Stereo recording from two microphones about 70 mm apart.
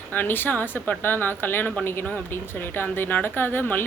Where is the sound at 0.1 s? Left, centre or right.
Left.